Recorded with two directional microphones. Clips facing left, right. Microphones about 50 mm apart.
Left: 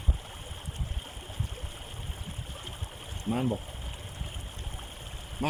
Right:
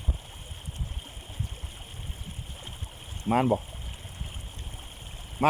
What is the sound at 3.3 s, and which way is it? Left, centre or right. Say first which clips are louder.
Speech: right 6 dB; right.